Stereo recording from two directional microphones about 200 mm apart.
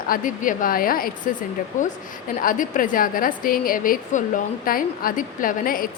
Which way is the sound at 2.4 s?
40° left (ahead or behind).